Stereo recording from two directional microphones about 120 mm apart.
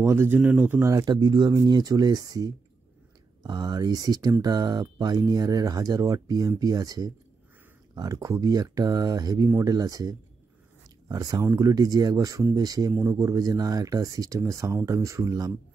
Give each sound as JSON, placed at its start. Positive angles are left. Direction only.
{"t": 0.0, "sound": "speech", "side_deg": -20}